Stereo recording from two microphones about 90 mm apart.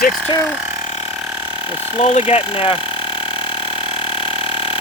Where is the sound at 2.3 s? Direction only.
90° left.